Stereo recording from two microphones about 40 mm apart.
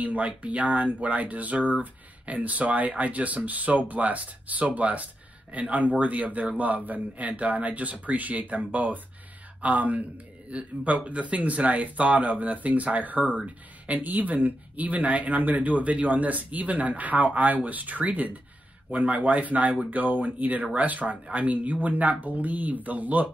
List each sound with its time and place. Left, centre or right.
0.0 s speech: right
19.9 s speech: right